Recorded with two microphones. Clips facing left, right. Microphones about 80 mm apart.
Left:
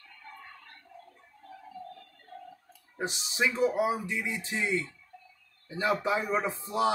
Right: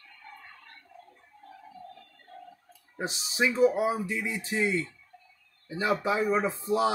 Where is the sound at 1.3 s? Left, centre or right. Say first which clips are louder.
Right 2 dB; right.